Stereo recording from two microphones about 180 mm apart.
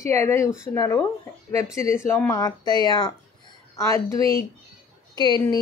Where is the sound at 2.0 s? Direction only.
15° left (ahead or behind).